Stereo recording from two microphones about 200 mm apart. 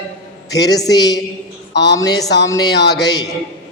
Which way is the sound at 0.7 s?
20° left (ahead or behind).